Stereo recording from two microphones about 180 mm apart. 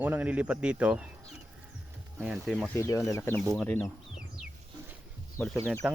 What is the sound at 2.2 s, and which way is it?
Speech, centre (ahead or behind).